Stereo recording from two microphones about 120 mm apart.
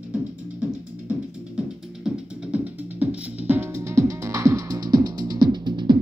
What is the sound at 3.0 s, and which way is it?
Music, 15° right (ahead or behind).